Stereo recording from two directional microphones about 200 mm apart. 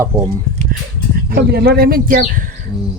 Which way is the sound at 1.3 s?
50° right (ahead or behind).